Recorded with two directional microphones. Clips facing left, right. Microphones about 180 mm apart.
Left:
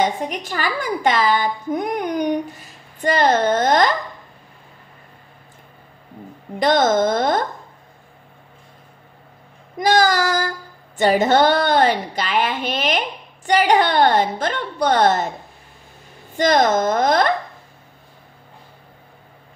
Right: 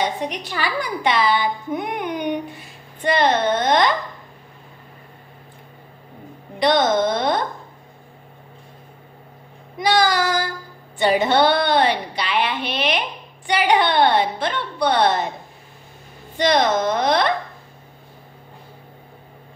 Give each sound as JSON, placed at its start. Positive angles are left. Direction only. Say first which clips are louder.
{"t": 0.0, "sound": "a woman's voice", "louder": "left 3 dB", "side_deg": 50}
{"t": 6.6, "sound": "a woman's voice", "louder": "left 1 dB", "side_deg": 45}
{"t": 9.8, "sound": "child singing", "louder": "left 2 dB", "side_deg": 45}
{"t": 11.0, "sound": "a woman's voice", "louder": "left 2 dB", "side_deg": 45}
{"t": 16.3, "sound": "a woman's voice", "louder": "left 2 dB", "side_deg": 45}